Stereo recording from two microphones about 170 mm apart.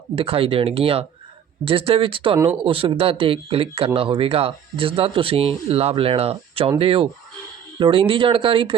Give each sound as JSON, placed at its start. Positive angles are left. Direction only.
{"t": 0.2, "sound": "speech", "side_deg": -35}